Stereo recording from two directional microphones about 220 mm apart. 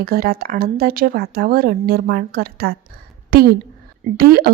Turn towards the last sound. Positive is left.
turn(degrees=-45)  # may be behind; listen again after turning